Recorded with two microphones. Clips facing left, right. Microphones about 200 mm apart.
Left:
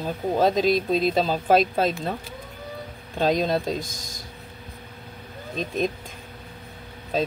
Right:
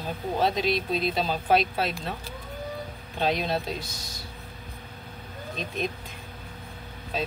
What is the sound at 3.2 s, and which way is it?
Speech, 45° left (ahead or behind).